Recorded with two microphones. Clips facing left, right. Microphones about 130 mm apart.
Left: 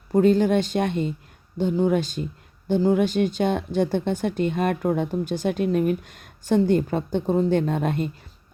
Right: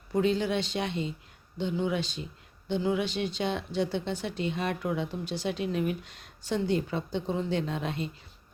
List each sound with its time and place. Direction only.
0.1 s speech: 45° left (ahead or behind)